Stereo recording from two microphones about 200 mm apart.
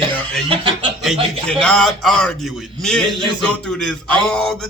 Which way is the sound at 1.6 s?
5° left (ahead or behind).